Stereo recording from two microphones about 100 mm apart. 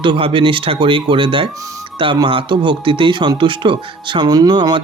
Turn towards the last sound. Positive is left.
turn(degrees=-45)  # may be behind; listen again after turning